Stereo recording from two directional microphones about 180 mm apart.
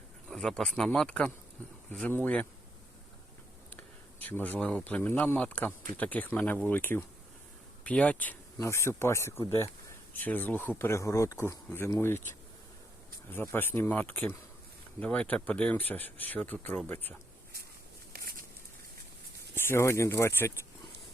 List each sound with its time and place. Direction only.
0.3 s speech: 5° left (ahead or behind)
3.8 s speech: 10° left (ahead or behind)
18.1 s a sound: 55° right (ahead or behind)
19.5 s speech: 15° left (ahead or behind)